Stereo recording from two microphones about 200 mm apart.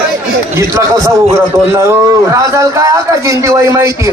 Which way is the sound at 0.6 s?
15° right (ahead or behind).